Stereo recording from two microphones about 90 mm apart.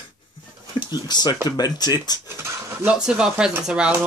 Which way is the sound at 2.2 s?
25° right (ahead or behind).